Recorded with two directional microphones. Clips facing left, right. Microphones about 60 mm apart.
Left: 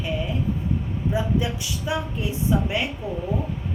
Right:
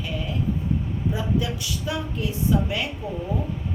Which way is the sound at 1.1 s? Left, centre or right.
Left.